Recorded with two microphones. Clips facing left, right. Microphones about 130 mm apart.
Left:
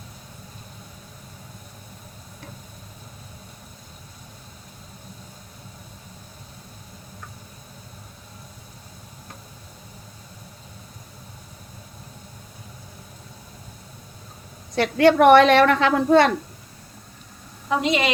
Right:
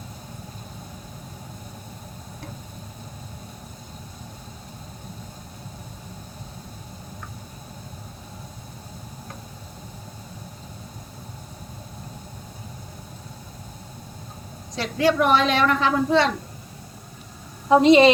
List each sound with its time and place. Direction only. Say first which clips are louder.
14.8 s a woman's voice: left 5 dB; 65° left (ahead or behind)
17.7 s a woman's voice: right 9 dB; 30° right (ahead or behind)